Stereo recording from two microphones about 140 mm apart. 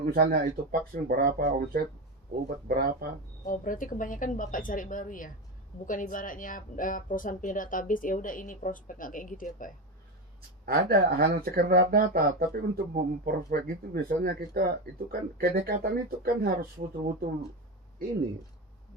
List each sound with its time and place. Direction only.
0.2 s speech: 90° right
3.4 s speech: 75° left (ahead or behind)
10.7 s speech: 90° right